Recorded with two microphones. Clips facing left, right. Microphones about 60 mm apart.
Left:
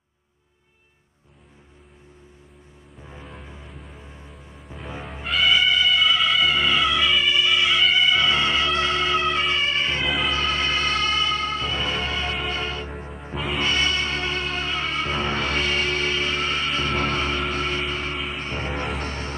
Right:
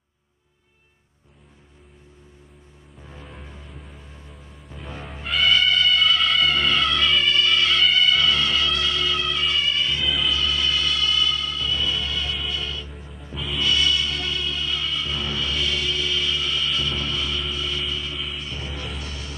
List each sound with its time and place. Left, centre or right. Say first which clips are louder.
3.0 s music: left 1 dB; centre
4.3 s music: left 2 dB; centre; by 19.3 s left